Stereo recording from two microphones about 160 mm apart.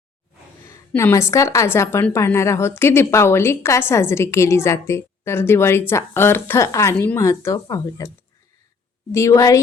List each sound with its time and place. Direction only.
0.6 s a woman's voice: 15° left (ahead or behind)
9.1 s speech: 20° left (ahead or behind)